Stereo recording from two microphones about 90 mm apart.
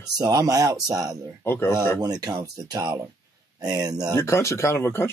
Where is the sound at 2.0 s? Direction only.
45° right (ahead or behind).